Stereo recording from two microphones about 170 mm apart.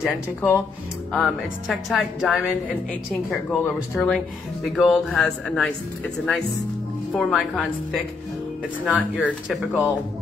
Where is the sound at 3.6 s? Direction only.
5° left (ahead or behind).